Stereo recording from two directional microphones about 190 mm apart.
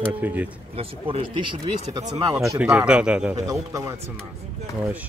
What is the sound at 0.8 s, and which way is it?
Speech, 30° right (ahead or behind).